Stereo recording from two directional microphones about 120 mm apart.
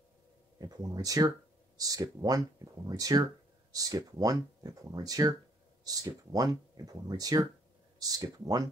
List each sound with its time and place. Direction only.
0.6 s speech: 30° right (ahead or behind)